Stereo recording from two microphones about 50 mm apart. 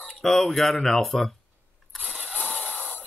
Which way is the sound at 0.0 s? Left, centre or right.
Centre.